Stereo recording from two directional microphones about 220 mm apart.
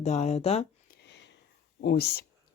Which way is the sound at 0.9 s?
50° left (ahead or behind).